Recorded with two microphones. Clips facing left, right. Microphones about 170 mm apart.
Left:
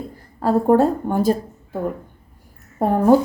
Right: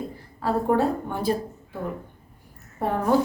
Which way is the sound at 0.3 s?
40° left (ahead or behind).